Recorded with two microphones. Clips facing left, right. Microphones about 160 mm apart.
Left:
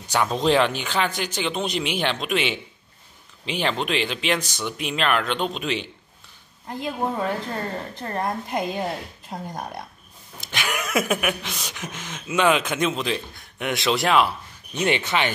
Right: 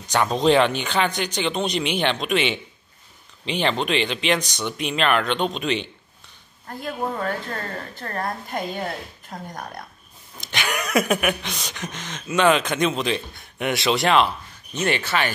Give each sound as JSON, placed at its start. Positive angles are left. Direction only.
{"t": 0.1, "sound": "speech", "side_deg": 0}
{"t": 6.7, "sound": "a woman's voice", "side_deg": 15}
{"t": 10.4, "sound": "speech", "side_deg": 5}